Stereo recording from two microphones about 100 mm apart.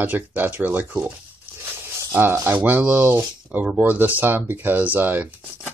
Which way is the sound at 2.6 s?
15° right (ahead or behind).